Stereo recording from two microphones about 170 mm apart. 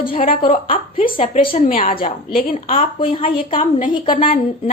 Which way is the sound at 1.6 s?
50° left (ahead or behind).